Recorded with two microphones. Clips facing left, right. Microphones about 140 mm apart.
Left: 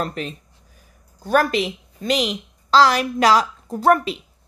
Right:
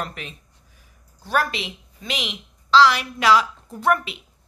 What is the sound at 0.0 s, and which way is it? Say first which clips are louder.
A woman's voice: left 6 dB; 35° left (ahead or behind).